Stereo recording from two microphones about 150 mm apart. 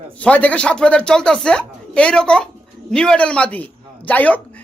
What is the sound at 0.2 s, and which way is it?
A woman's voice, 10° left (ahead or behind).